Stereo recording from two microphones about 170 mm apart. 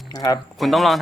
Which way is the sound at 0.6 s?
Centre (ahead or behind).